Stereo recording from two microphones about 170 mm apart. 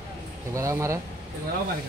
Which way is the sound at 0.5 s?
15° right (ahead or behind).